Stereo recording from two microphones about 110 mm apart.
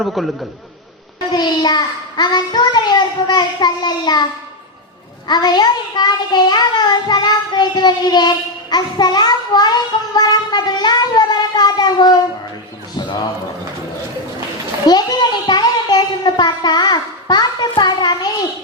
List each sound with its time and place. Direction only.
0.0 s a man's voice: centre (ahead or behind)
1.3 s a child's voice: 40° left (ahead or behind)
5.3 s a child's voice: 40° left (ahead or behind)
14.8 s a child's voice: 40° left (ahead or behind)